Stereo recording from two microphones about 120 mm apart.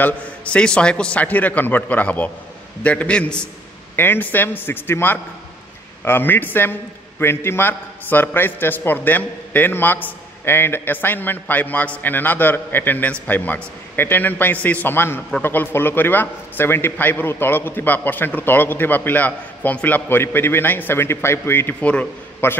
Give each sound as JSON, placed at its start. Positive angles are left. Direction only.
{"t": 0.0, "sound": "a man's voice", "side_deg": 10}